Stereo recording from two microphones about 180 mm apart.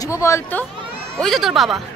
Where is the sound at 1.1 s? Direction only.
Centre (ahead or behind).